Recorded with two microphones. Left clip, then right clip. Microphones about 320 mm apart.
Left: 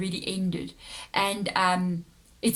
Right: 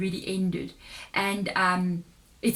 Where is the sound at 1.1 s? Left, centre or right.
Left.